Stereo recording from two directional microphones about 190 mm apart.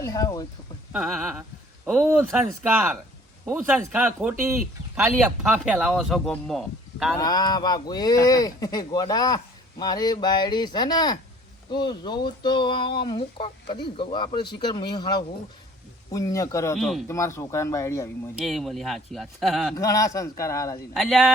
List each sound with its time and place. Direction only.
0.0 s speech: 20° left (ahead or behind)
0.9 s speech: 5° right (ahead or behind)
7.2 s speech: 20° left (ahead or behind)
16.7 s speech: centre (ahead or behind)
17.1 s speech: 15° left (ahead or behind)
18.3 s speech: centre (ahead or behind)
19.7 s speech: 20° left (ahead or behind)
20.9 s speech: centre (ahead or behind)